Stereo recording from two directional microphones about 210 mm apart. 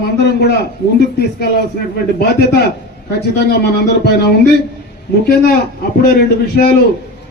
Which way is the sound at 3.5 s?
55° left (ahead or behind).